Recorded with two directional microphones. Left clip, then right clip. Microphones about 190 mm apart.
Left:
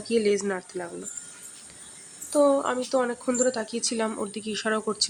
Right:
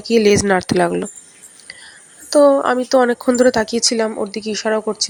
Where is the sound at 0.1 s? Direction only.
45° right (ahead or behind).